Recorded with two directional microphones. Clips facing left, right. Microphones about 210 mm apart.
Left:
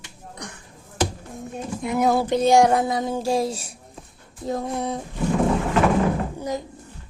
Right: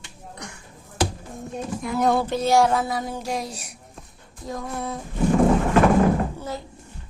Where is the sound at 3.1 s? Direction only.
30° left (ahead or behind).